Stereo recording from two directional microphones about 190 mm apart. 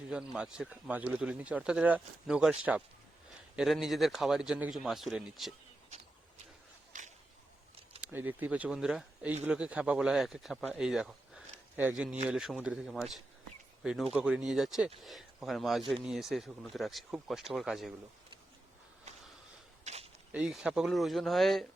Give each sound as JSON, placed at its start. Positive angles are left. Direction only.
{"t": 0.1, "sound": "speech", "side_deg": -5}
{"t": 6.9, "sound": "a sound", "side_deg": -40}
{"t": 8.0, "sound": "speech", "side_deg": -10}
{"t": 19.8, "sound": "walk", "side_deg": -35}
{"t": 20.3, "sound": "speech", "side_deg": -5}